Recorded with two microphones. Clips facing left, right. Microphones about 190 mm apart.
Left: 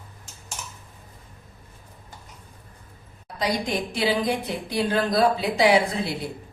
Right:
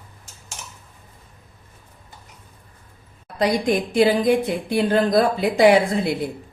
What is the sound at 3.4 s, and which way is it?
Speech, 50° right (ahead or behind).